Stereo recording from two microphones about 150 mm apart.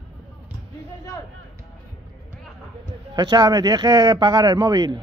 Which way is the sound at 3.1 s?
30° right (ahead or behind).